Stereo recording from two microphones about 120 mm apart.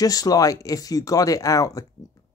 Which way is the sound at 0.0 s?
30° left (ahead or behind).